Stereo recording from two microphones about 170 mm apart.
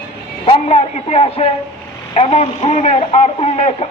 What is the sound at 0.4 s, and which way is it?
A man's voice, 35° left (ahead or behind).